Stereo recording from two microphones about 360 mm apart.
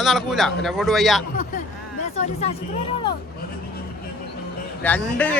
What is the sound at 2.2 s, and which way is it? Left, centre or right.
Speech, centre.